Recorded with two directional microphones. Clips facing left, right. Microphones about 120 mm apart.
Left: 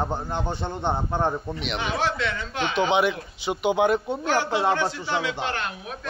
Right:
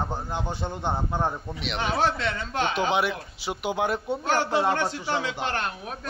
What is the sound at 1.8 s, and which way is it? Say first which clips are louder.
Speech: right 2 dB; 40° right (ahead or behind).